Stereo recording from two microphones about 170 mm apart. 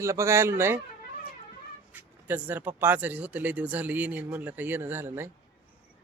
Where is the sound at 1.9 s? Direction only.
10° right (ahead or behind).